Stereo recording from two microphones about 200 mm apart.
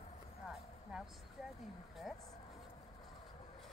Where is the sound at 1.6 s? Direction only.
Centre (ahead or behind).